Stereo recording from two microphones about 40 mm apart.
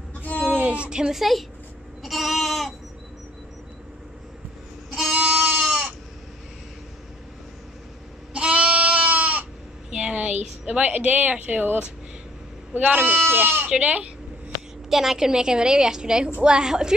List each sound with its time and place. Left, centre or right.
0.2 s a sound: left
0.6 s a sound: right
0.8 s a woman's voice: centre
1.1 s a woman's voice: centre
2.0 s goat: centre
5.1 s goat: right
8.3 s goat: right
9.8 s a sound: right
11.3 s speech: right
12.7 s speech: right
13.4 s speech: right
13.7 s speech: right
14.9 s a woman's voice: centre